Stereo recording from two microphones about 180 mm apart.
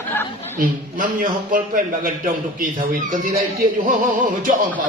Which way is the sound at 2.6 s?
50° right (ahead or behind).